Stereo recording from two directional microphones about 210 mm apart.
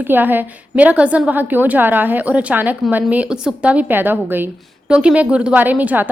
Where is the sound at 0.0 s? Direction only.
10° right (ahead or behind).